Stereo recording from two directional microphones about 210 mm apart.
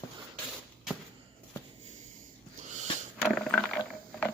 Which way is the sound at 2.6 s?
35° right (ahead or behind).